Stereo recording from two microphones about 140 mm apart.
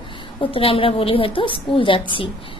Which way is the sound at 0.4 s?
40° left (ahead or behind).